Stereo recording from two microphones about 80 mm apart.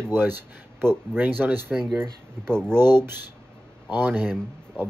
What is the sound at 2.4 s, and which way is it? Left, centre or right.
Speech, centre.